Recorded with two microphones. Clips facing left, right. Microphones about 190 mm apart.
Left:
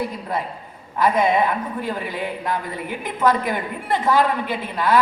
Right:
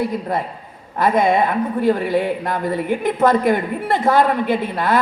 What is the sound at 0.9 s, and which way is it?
Speech, 50° right (ahead or behind).